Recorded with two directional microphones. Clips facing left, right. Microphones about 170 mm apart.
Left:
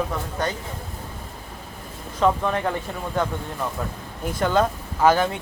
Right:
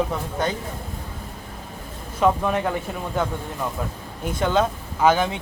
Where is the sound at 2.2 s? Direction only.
10° right (ahead or behind).